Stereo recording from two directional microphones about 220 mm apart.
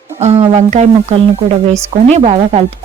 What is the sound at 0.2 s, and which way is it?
Speech, 30° right (ahead or behind).